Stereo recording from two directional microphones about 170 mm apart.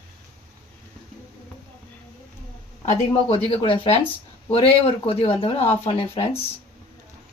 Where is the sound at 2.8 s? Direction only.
35° left (ahead or behind).